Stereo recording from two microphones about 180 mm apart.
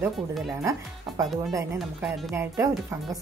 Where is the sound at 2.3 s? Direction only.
15° right (ahead or behind).